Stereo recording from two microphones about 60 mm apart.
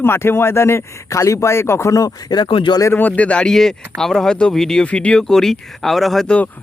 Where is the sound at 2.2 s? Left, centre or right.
Left.